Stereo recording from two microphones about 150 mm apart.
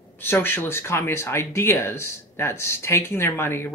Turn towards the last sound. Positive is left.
turn(degrees=15)  # may be behind; listen again after turning